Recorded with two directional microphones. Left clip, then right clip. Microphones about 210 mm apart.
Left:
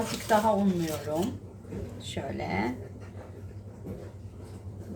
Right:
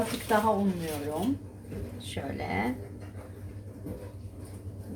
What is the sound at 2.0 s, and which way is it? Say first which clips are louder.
Speech: left 1 dB; 10° left (ahead or behind).